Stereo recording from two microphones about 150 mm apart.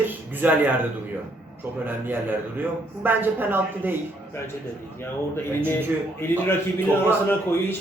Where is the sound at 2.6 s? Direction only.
15° right (ahead or behind).